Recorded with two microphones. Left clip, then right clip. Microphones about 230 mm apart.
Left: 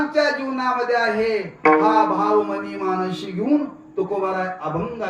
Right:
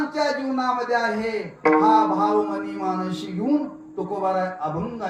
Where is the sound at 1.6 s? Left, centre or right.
Left.